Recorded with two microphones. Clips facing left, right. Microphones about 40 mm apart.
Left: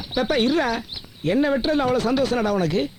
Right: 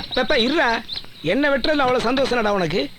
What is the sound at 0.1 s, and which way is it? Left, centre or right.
Speech, right.